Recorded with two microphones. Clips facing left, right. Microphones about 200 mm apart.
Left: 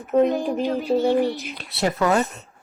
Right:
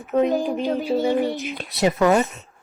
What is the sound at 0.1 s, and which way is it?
Speech, centre (ahead or behind).